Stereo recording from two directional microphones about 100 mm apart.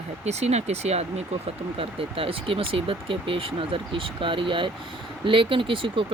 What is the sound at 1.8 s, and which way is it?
Speech, 70° right (ahead or behind).